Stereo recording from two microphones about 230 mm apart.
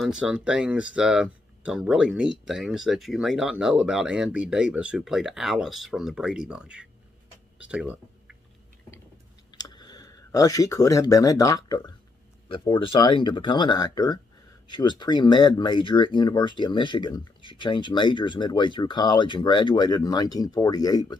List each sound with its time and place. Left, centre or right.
0.0 s speech: centre
9.6 s speech: centre